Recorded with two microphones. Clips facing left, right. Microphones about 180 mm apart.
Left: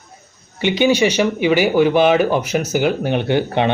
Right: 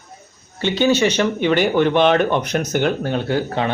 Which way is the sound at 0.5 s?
15° left (ahead or behind).